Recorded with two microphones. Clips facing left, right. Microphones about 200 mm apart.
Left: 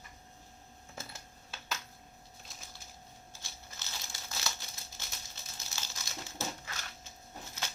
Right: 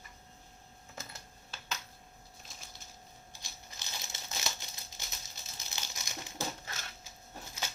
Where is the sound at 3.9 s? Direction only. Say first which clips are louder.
Right 1 dB; 20° right (ahead or behind).